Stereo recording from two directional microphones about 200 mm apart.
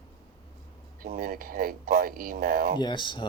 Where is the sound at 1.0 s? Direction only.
45° right (ahead or behind).